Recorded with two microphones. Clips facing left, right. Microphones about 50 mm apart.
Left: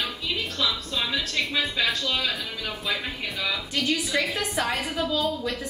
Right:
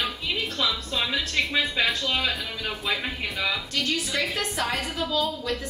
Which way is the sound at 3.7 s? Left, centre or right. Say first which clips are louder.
Left 2 dB; centre.